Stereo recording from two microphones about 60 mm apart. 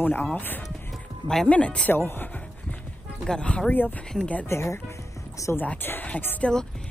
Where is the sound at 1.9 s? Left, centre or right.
Left.